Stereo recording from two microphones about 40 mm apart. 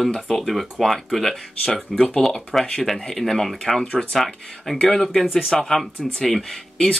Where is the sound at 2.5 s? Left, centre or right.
Centre.